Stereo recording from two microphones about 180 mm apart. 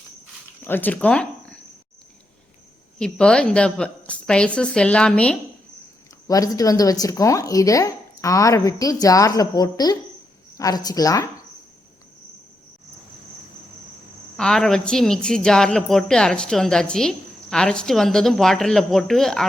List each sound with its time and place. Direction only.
0.6 s speech: 10° left (ahead or behind)
3.0 s a woman's voice: 5° left (ahead or behind)
6.2 s a woman's voice: 20° left (ahead or behind)
14.3 s a woman's voice: 5° left (ahead or behind)